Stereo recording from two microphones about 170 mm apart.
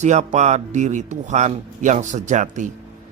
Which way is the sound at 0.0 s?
45° right (ahead or behind).